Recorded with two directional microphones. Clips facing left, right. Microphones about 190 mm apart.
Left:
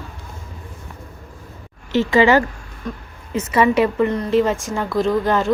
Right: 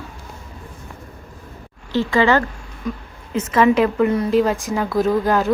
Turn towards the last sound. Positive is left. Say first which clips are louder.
# even
turn(degrees=0)  # may be behind; listen again after turning